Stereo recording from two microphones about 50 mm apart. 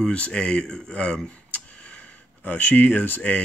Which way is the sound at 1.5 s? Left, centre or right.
Left.